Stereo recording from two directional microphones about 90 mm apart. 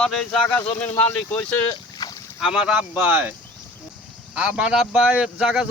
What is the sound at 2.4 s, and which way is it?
Speech, 10° right (ahead or behind).